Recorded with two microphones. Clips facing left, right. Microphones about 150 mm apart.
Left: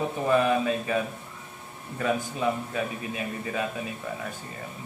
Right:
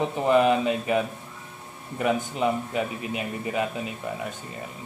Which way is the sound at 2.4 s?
20° right (ahead or behind).